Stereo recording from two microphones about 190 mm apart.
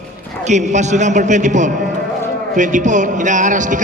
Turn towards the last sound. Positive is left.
turn(degrees=-40)  # may be behind; listen again after turning